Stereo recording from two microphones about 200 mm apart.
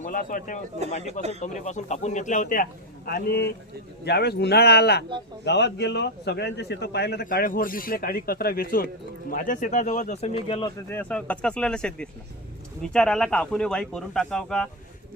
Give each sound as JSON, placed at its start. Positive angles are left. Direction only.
{"t": 0.0, "sound": "a man's voice", "side_deg": 45}
{"t": 3.1, "sound": "a man's voice", "side_deg": 50}
{"t": 10.8, "sound": "speech", "side_deg": 10}